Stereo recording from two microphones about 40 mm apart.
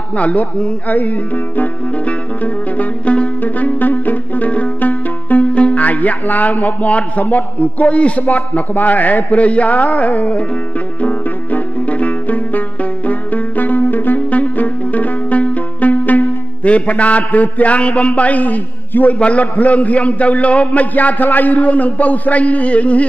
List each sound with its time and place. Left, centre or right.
0.2 s a man's voice: left
1.6 s music: left
4.7 s speech: left
11.0 s music: left
14.3 s music: left
19.1 s a man's voice: left